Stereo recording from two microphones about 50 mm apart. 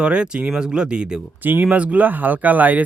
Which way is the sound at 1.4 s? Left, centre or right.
Right.